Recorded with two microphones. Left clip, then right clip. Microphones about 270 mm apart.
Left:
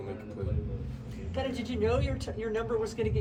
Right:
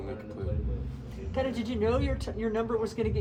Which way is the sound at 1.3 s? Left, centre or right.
Right.